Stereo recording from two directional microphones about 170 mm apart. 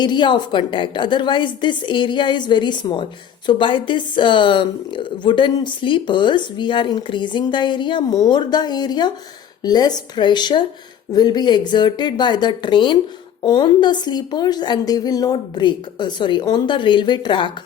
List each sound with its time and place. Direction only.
0.0 s a woman's voice: 25° left (ahead or behind)